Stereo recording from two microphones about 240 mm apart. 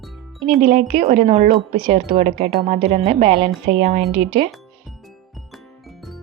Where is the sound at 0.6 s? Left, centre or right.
Right.